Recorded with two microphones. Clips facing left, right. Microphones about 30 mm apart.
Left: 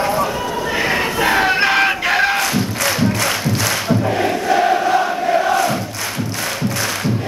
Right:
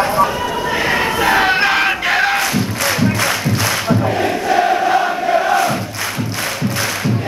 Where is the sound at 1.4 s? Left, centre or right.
Centre.